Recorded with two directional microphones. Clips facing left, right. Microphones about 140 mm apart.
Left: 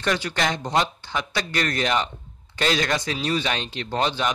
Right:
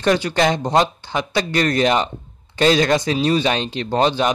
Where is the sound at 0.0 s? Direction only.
25° right (ahead or behind).